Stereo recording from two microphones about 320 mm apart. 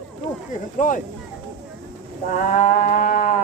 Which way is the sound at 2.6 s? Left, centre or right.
Left.